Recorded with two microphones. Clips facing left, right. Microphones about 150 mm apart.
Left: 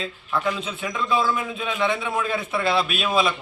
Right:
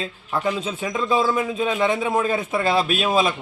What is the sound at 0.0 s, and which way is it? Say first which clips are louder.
Speech: right 1 dB; 40° right (ahead or behind).